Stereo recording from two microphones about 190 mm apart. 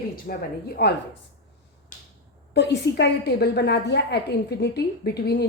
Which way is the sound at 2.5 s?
65° left (ahead or behind).